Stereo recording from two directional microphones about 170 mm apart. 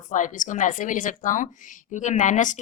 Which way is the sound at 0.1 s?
50° left (ahead or behind).